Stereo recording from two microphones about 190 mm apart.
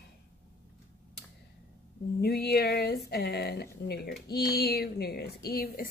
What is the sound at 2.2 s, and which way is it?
Speech, 55° left (ahead or behind).